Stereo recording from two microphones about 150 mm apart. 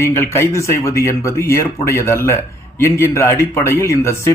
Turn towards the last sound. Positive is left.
turn(degrees=20)  # may be behind; listen again after turning